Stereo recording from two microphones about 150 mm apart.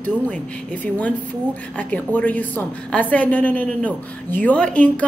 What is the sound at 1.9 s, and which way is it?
A woman's voice, 10° left (ahead or behind).